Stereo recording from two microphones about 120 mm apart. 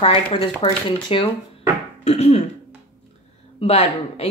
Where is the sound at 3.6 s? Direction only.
60° left (ahead or behind).